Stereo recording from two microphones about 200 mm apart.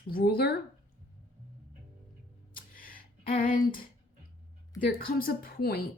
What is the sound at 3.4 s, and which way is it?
Speech, 45° left (ahead or behind).